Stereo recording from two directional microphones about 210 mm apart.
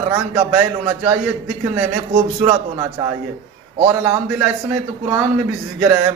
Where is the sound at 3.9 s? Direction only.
15° right (ahead or behind).